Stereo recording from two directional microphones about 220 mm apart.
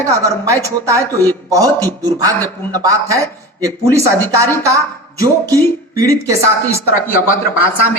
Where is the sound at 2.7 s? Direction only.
15° right (ahead or behind).